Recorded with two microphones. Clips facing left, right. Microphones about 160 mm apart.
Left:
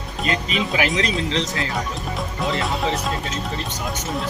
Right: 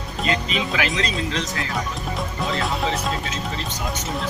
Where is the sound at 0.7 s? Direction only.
20° left (ahead or behind).